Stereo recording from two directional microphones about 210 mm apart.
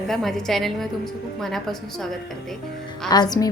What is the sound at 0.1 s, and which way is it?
A woman's voice, centre (ahead or behind).